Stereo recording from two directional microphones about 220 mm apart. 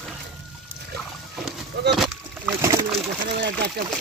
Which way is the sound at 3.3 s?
50° right (ahead or behind).